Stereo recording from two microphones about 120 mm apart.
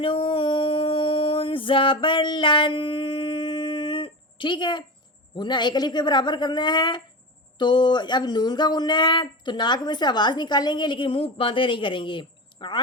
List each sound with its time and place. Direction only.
0.0 s music: 45° left (ahead or behind)
5.3 s speech: 40° left (ahead or behind)